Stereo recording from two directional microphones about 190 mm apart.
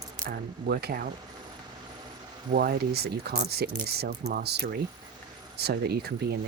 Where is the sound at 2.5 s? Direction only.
55° right (ahead or behind).